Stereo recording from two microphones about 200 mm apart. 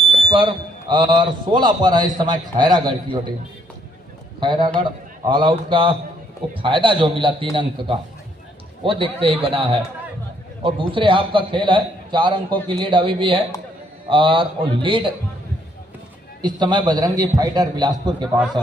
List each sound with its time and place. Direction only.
0.3 s a man's voice: 25° right (ahead or behind)
4.4 s a man's voice: 25° right (ahead or behind)
16.4 s a man's voice: 20° right (ahead or behind)